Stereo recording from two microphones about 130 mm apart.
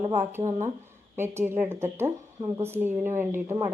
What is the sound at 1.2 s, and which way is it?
Speech, 20° right (ahead or behind).